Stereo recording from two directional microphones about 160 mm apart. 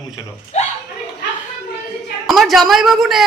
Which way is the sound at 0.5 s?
45° left (ahead or behind).